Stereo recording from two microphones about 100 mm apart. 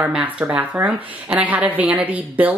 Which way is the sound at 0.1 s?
10° right (ahead or behind).